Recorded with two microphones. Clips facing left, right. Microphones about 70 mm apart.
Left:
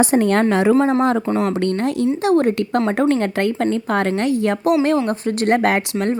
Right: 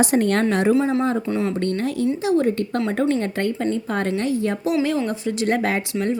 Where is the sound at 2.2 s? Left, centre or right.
Left.